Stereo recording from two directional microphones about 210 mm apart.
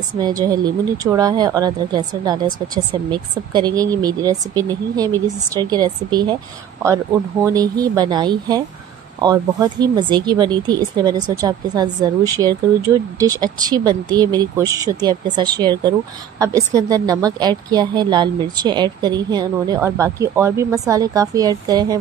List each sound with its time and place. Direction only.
0.2 s speech: 20° right (ahead or behind)
7.4 s a woman's voice: 15° right (ahead or behind)